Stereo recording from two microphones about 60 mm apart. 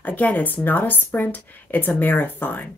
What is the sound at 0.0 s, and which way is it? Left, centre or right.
Speech, left.